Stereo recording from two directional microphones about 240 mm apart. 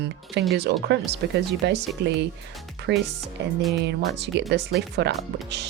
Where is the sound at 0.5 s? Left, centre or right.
Right.